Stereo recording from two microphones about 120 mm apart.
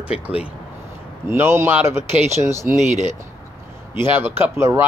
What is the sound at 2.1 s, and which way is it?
Speech, 70° right (ahead or behind).